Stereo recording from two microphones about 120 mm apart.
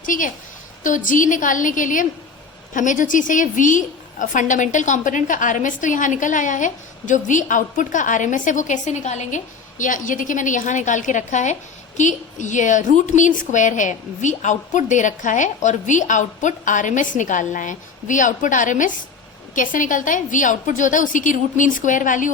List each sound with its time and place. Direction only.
0.0 s a woman's voice: 90° left